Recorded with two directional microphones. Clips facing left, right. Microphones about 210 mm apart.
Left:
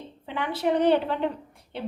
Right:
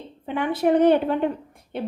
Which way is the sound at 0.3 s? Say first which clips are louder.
Right 5 dB; 50° right (ahead or behind).